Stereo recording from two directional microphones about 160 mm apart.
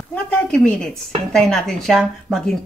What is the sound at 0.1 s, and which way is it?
A woman's voice, 5° left (ahead or behind).